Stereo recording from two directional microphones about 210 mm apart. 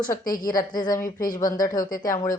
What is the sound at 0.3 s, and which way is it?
Speech, 40° left (ahead or behind).